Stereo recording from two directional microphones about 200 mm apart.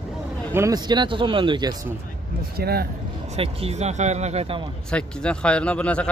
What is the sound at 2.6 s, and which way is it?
Speech, 50° right (ahead or behind).